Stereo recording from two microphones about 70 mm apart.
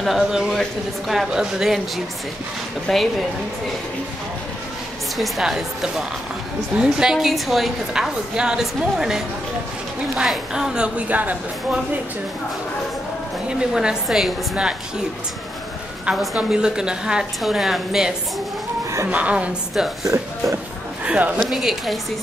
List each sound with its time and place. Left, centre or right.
0.0 s speech: centre
2.9 s speech: centre
5.1 s a woman's voice: centre; by 11.8 s right
13.5 s a woman's voice: centre
16.4 s a woman's voice: centre
19.0 s a woman's voice: centre
19.7 s speech: centre
21.0 s speech: centre
21.4 s speech: centre